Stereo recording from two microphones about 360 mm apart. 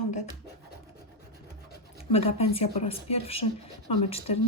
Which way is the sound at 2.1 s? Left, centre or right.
Centre.